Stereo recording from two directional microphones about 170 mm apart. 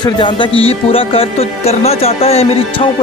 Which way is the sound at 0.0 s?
30° left (ahead or behind).